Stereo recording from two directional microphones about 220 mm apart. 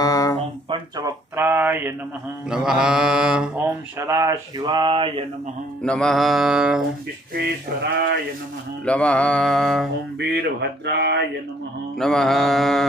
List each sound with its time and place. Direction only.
0.0 s a sound: 15° left (ahead or behind)
0.7 s speech: 15° right (ahead or behind)
2.5 s mantra: 5° right (ahead or behind); by 5.2 s 25° right (ahead or behind)
5.8 s mantra: 5° left (ahead or behind)
8.8 s mantra: 5° left (ahead or behind)
10.1 s speech: 45° right (ahead or behind)
12.0 s mantra: centre (ahead or behind)